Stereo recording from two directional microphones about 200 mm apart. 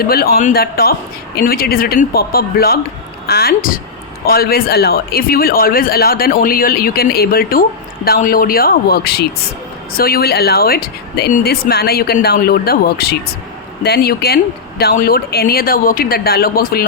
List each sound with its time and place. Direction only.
0.0 s speech: 50° left (ahead or behind)